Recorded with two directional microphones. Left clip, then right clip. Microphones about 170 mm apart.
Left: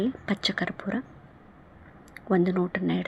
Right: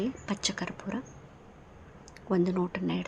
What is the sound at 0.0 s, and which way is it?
Speech, 30° left (ahead or behind).